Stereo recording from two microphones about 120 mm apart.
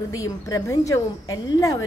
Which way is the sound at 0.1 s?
30° left (ahead or behind).